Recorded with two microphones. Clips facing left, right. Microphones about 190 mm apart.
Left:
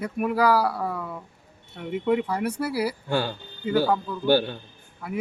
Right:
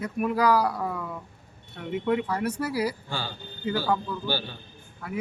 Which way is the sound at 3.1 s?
60° left (ahead or behind).